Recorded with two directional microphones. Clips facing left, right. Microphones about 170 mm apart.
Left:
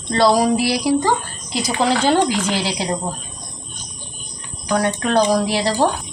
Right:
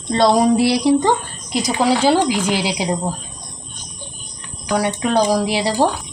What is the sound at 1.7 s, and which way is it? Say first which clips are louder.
A woman's voice: right 2 dB; 10° right (ahead or behind).